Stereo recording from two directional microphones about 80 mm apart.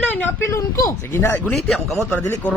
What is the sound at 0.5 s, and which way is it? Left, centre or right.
Speech, left.